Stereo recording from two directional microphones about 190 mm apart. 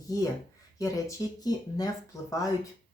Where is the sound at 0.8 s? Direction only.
20° left (ahead or behind).